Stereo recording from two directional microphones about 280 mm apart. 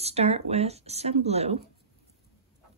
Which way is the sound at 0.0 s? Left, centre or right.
Right.